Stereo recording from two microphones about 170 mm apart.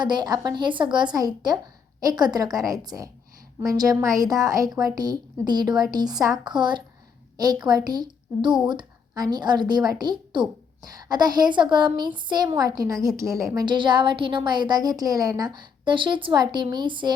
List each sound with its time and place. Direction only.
0.0 s a woman's voice: 25° right (ahead or behind)